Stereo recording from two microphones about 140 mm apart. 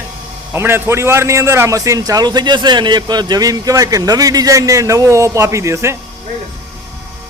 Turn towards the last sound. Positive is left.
turn(degrees=-20)  # may be behind; listen again after turning